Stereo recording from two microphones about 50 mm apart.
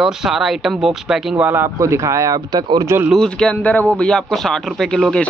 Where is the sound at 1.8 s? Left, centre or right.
Right.